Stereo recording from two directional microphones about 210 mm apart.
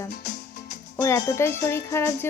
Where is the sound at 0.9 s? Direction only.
15° left (ahead or behind).